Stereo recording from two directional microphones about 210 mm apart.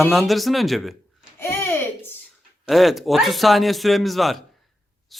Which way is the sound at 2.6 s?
Centre (ahead or behind).